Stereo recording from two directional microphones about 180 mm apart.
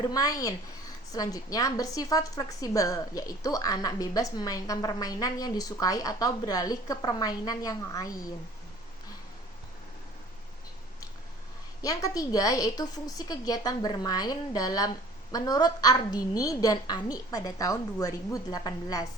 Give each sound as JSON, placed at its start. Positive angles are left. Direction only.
{"t": 0.0, "sound": "a woman's voice", "side_deg": 20}
{"t": 12.0, "sound": "a woman's voice", "side_deg": 20}